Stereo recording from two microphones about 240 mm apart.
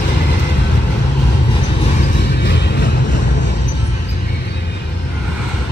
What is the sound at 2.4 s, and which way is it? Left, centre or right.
Vehicle, left.